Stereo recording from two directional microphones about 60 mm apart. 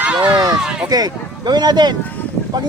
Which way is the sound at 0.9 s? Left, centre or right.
Right.